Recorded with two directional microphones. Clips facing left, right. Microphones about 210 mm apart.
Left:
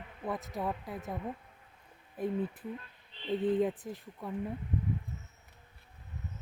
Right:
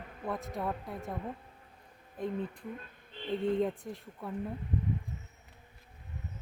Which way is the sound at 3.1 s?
50° right (ahead or behind).